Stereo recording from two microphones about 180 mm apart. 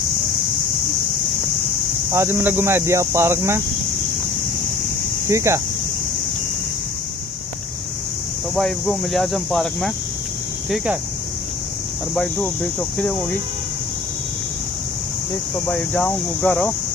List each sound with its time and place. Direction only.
2.1 s speech: 15° right (ahead or behind)
5.3 s speech: 15° right (ahead or behind)
8.5 s speech: centre (ahead or behind)
12.9 s speech: 10° left (ahead or behind)
15.5 s speech: 5° left (ahead or behind)